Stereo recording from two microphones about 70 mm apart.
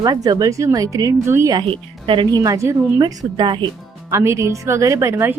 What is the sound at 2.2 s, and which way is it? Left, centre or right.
Speech, right.